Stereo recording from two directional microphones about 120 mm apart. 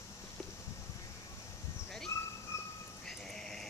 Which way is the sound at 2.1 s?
25° left (ahead or behind).